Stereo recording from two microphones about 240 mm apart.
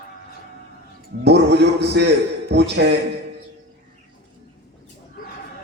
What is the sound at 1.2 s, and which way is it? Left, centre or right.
A man's voice, right.